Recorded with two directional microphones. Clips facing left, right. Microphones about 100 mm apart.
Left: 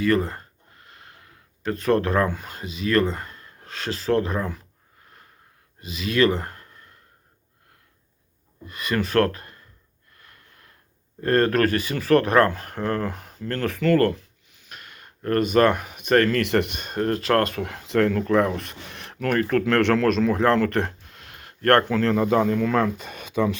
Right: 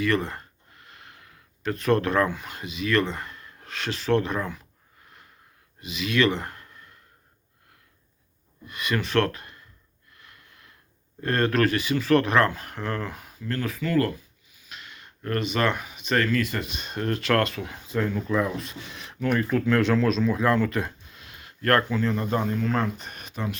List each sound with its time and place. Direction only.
0.0 s speech: 35° left (ahead or behind)
5.8 s speech: 35° left (ahead or behind)
8.6 s speech: 35° left (ahead or behind)
10.2 s a sound: 35° left (ahead or behind)
11.2 s speech: 40° left (ahead or behind); by 14.3 s 60° left (ahead or behind)
14.7 s speech: 45° left (ahead or behind)
17.5 s speech: 60° left (ahead or behind); by 22.5 s 90° left